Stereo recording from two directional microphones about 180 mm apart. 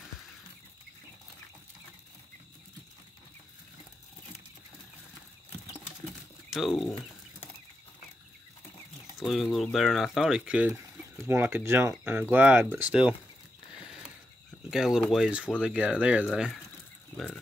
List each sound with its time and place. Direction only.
6.5 s speech: centre (ahead or behind)
9.2 s speech: centre (ahead or behind)
14.7 s speech: centre (ahead or behind)